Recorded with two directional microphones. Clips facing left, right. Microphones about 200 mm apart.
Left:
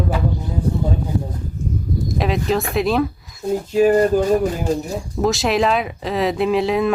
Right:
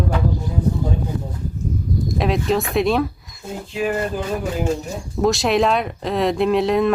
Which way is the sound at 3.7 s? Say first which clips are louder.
Left 8 dB; 40° left (ahead or behind).